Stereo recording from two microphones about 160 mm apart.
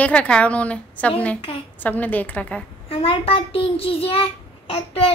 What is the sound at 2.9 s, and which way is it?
Child singing, 35° left (ahead or behind).